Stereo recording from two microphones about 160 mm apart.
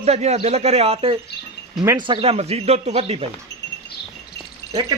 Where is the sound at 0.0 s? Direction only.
45° right (ahead or behind).